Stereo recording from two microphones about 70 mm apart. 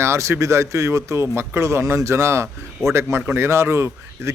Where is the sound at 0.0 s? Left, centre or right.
Right.